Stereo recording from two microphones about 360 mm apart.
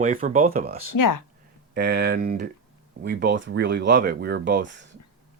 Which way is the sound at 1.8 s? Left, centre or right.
Right.